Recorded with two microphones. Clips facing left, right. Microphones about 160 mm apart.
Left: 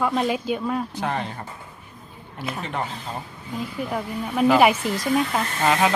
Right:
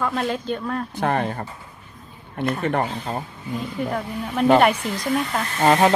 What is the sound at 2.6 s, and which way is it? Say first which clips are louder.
Speech: right 5 dB; 55° right (ahead or behind).